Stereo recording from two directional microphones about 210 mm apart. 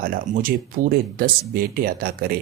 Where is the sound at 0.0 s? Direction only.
45° right (ahead or behind).